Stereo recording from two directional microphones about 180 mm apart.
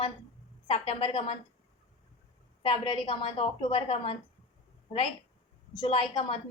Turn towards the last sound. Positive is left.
turn(degrees=30)  # may be behind; listen again after turning